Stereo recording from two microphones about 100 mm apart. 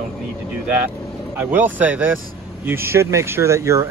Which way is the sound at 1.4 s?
15° right (ahead or behind).